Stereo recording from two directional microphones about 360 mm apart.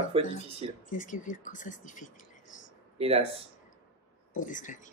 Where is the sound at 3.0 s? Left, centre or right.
Centre.